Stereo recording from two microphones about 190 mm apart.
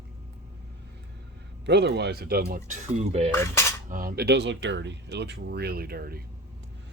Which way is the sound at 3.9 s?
50° right (ahead or behind).